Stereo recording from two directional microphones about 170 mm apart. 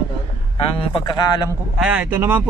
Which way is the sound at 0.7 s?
30° left (ahead or behind).